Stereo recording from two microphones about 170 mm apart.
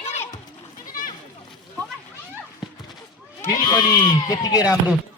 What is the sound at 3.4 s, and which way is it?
Bleat, 25° left (ahead or behind).